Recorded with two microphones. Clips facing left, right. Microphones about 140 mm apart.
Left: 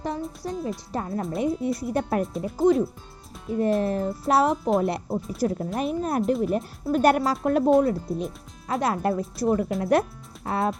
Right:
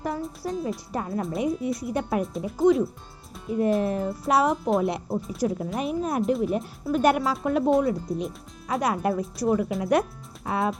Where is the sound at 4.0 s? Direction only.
30° left (ahead or behind).